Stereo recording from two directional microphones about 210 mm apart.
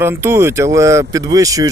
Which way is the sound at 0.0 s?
10° right (ahead or behind).